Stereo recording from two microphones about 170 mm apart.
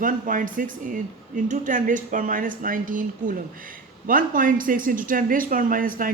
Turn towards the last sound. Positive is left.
turn(degrees=-55)  # may be behind; listen again after turning